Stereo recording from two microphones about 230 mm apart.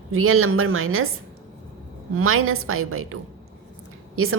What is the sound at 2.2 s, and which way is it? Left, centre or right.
A woman's voice, right.